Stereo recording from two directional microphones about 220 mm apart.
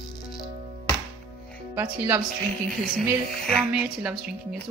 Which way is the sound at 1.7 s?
10° right (ahead or behind).